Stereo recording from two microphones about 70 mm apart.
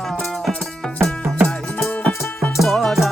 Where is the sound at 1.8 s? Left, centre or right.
Left.